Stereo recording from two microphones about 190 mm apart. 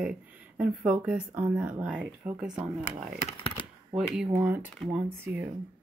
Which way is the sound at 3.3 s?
25° left (ahead or behind).